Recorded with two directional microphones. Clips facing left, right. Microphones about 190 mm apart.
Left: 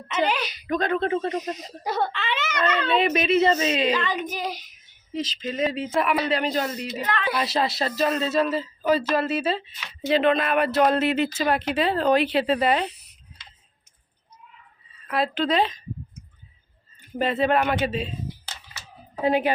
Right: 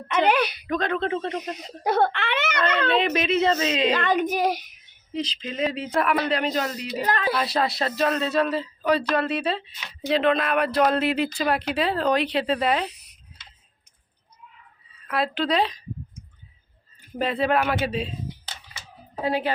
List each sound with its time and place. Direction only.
0.1 s speech: 60° right (ahead or behind)
0.7 s speech: centre (ahead or behind)
1.5 s speech: 60° right (ahead or behind)
2.9 s speech: 5° left (ahead or behind)
3.9 s speech: 55° right (ahead or behind)
5.1 s speech: 5° left (ahead or behind)
7.0 s speech: 40° right (ahead or behind)
7.3 s speech: centre (ahead or behind)
15.0 s speech: centre (ahead or behind)
17.2 s speech: centre (ahead or behind)
19.2 s a woman's voice: 20° left (ahead or behind)